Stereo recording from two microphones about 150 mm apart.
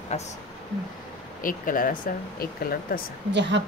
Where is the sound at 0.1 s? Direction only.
45° left (ahead or behind).